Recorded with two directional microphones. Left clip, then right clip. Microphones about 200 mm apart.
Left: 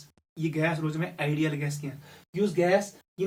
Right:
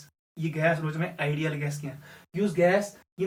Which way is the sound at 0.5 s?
50° left (ahead or behind).